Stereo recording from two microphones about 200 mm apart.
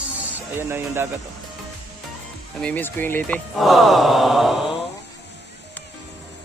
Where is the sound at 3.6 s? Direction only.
Centre (ahead or behind).